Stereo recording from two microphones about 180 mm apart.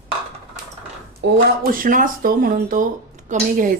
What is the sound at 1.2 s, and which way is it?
Speech, 55° right (ahead or behind).